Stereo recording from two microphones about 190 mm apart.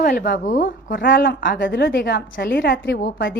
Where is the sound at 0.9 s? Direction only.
65° left (ahead or behind).